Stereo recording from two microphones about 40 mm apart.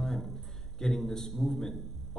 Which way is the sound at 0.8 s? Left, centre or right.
Centre.